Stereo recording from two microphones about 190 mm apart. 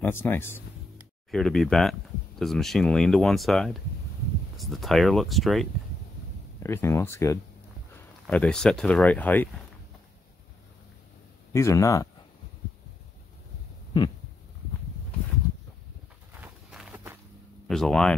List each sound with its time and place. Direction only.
0.0 s speech: 10° left (ahead or behind)
1.3 s speech: centre (ahead or behind)
6.6 s speech: 15° left (ahead or behind)
11.5 s speech: 15° left (ahead or behind)
16.3 s walk: 10° right (ahead or behind)
17.6 s speech: 5° left (ahead or behind)